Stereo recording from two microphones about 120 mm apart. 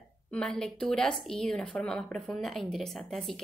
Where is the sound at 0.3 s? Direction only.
5° left (ahead or behind).